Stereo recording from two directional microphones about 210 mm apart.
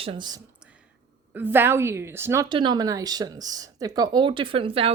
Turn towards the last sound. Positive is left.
turn(degrees=-25)  # may be behind; listen again after turning